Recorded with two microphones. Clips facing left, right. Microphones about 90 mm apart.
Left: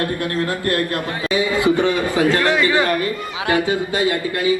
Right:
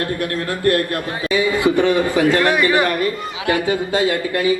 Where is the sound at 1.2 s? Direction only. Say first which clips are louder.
Right 2 dB; 25° left (ahead or behind).